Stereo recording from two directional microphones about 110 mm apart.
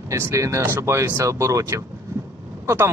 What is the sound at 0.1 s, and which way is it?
Speech, 30° right (ahead or behind).